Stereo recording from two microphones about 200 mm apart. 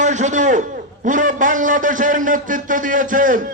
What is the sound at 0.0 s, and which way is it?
A man's voice, 35° right (ahead or behind).